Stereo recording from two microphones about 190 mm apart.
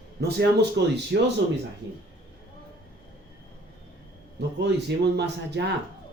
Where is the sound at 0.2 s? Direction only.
60° right (ahead or behind).